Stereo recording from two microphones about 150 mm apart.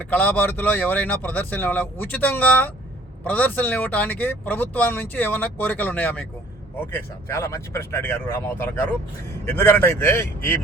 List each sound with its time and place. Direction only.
0.0 s speech: 10° left (ahead or behind)